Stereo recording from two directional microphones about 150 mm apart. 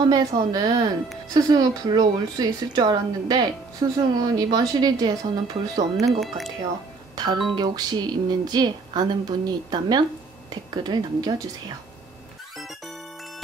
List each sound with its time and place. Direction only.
0.0 s speech: 25° right (ahead or behind)
6.0 s speech: centre (ahead or behind)
7.2 s speech: 25° right (ahead or behind)
12.5 s music: centre (ahead or behind)